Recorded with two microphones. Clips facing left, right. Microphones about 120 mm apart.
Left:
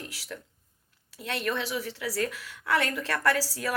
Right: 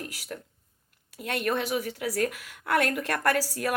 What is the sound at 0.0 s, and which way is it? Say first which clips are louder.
A woman's voice: right 3 dB; 50° right (ahead or behind).